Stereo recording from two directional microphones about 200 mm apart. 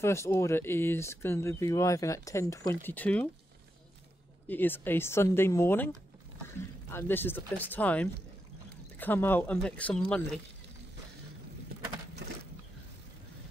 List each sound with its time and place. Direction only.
0.0 s speech: 15° left (ahead or behind)
4.5 s speech: 10° left (ahead or behind)
6.9 s speech: 10° left (ahead or behind)